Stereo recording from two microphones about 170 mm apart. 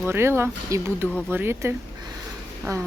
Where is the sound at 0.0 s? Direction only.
15° right (ahead or behind).